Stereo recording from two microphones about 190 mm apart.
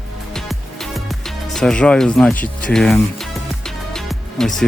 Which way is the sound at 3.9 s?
Centre (ahead or behind).